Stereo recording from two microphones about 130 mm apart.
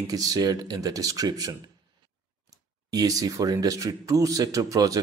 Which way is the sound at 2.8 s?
30° right (ahead or behind).